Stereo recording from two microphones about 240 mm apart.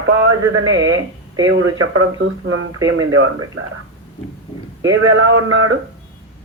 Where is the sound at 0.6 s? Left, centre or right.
Right.